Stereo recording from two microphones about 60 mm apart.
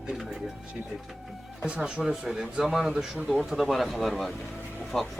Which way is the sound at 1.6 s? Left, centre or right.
Centre.